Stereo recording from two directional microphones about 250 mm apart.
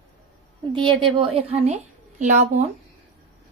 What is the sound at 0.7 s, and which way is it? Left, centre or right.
A woman's voice, centre.